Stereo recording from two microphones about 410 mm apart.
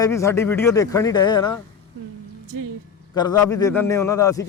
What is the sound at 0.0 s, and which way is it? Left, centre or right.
A man's voice, centre.